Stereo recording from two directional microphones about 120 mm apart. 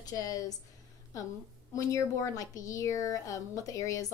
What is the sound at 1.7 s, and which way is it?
A woman's voice, 30° left (ahead or behind).